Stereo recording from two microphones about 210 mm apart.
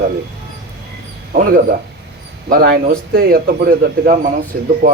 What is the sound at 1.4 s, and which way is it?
Speech, 40° right (ahead or behind).